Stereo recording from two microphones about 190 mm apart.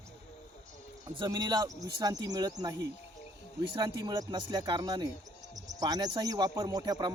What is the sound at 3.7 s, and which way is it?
A man's voice, 25° right (ahead or behind).